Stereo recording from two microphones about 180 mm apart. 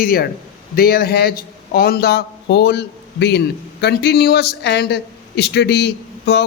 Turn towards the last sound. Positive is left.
turn(degrees=65)  # may be behind; listen again after turning